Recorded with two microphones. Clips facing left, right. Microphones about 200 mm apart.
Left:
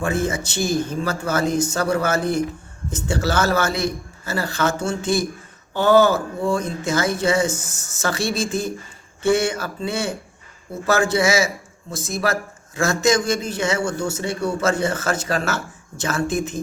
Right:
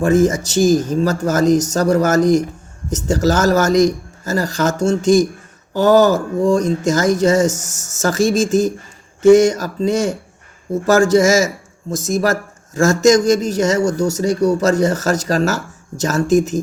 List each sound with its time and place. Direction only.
0.0 s speech: 40° right (ahead or behind)